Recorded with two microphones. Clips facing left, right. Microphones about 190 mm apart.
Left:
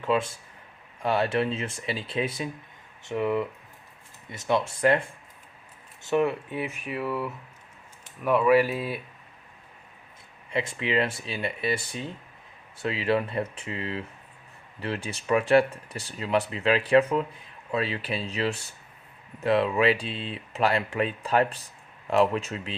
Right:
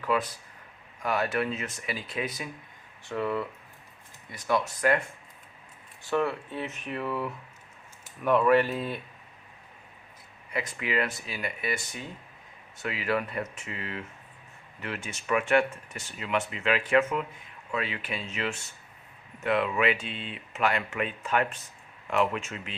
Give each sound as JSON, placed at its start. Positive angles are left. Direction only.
{"t": 0.0, "sound": "speech", "side_deg": 25}
{"t": 6.1, "sound": "speech", "side_deg": 20}
{"t": 10.5, "sound": "speech", "side_deg": 25}